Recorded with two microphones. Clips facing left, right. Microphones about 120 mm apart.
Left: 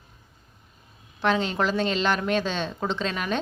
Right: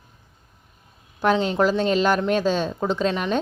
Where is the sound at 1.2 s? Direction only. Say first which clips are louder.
Right 4 dB; 5° right (ahead or behind).